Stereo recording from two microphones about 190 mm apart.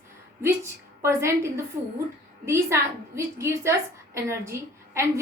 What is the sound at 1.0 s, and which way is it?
A woman's voice, 15° right (ahead or behind).